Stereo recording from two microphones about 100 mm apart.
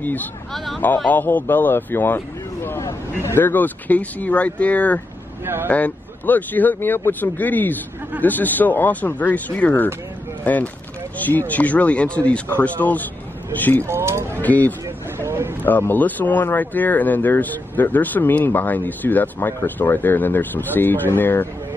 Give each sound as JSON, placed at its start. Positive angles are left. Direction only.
{"t": 0.0, "sound": "speech", "side_deg": 15}
{"t": 5.4, "sound": "speech", "side_deg": -25}
{"t": 5.7, "sound": "speech", "side_deg": 15}
{"t": 13.8, "sound": "speech", "side_deg": -25}
{"t": 14.4, "sound": "speech", "side_deg": 15}
{"t": 15.1, "sound": "a sound", "side_deg": -25}
{"t": 15.6, "sound": "speech", "side_deg": 20}